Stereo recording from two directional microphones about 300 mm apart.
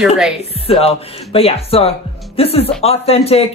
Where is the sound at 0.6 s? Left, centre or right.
Centre.